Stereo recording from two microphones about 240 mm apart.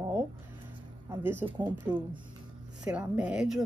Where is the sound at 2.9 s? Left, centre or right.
Centre.